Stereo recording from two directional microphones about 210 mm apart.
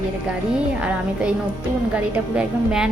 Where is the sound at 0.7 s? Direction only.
5° right (ahead or behind).